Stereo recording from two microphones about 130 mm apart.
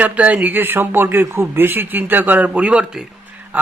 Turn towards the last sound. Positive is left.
turn(degrees=-10)  # may be behind; listen again after turning